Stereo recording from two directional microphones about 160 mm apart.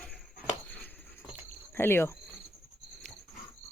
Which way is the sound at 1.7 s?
15° left (ahead or behind).